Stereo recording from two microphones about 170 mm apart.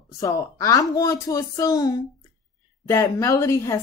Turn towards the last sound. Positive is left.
turn(degrees=15)  # may be behind; listen again after turning